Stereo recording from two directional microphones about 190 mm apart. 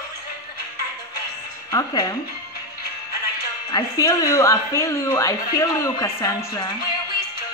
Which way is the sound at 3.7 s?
20° left (ahead or behind).